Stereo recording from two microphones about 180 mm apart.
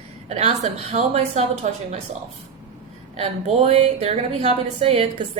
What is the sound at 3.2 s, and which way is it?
A woman's voice, 40° right (ahead or behind).